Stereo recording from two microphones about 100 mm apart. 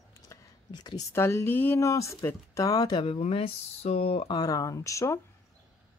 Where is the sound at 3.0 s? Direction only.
70° left (ahead or behind).